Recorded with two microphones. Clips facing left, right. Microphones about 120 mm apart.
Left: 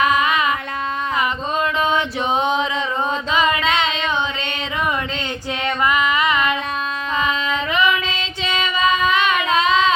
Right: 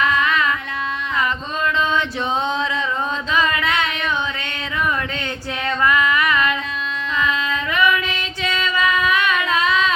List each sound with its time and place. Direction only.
0.0 s carnatic music: 20° left (ahead or behind)
3.3 s a sound: 20° left (ahead or behind)
5.8 s music: 20° left (ahead or behind)
7.2 s female singing: 20° left (ahead or behind)